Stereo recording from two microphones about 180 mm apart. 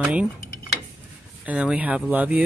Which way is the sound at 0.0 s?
5° right (ahead or behind).